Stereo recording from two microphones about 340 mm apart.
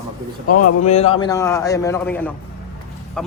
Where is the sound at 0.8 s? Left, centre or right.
Centre.